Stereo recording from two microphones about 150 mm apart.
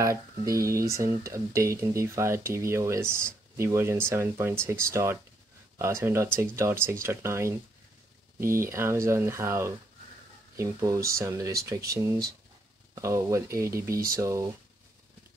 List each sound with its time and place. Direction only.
0.0 s speech: 20° right (ahead or behind)